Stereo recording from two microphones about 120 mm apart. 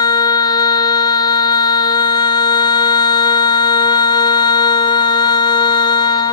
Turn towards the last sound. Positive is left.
turn(degrees=35)  # may be behind; listen again after turning